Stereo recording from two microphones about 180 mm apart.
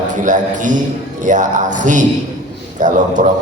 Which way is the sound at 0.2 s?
45° right (ahead or behind).